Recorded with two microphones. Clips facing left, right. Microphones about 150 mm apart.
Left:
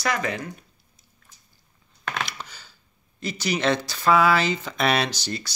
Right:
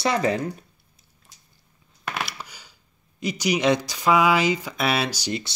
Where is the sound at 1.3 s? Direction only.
90° right.